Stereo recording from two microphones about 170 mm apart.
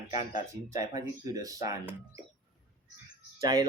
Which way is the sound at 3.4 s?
20° right (ahead or behind).